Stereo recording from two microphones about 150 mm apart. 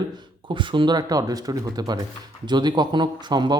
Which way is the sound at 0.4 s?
30° right (ahead or behind).